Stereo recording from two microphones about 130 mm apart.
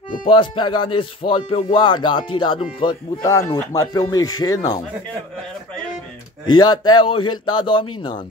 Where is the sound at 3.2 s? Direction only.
25° left (ahead or behind).